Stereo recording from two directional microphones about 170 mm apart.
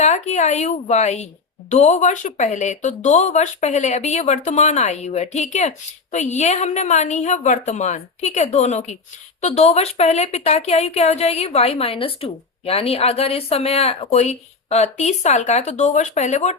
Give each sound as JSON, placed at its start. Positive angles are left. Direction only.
{"t": 0.0, "sound": "a woman's voice", "side_deg": 45}